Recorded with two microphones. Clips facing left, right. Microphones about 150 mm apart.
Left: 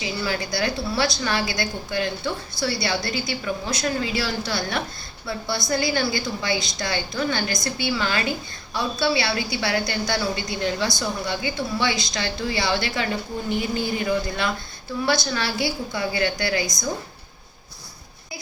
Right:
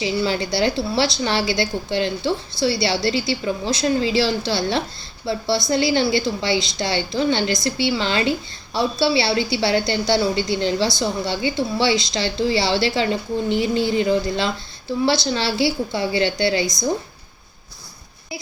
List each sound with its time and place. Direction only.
0.0 s a woman's voice: 25° right (ahead or behind)